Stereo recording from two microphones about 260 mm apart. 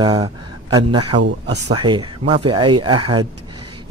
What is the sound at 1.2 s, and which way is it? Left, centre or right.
Speech, right.